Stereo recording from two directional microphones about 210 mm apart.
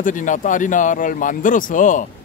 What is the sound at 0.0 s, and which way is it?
Speech, 40° left (ahead or behind).